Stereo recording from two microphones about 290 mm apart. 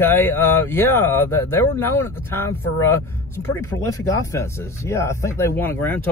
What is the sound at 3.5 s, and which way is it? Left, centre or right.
Speech, centre.